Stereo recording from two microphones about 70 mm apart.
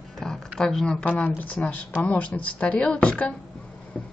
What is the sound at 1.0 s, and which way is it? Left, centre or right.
A woman's voice, left.